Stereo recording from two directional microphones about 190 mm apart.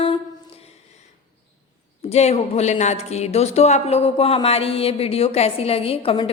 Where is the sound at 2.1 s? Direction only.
35° left (ahead or behind).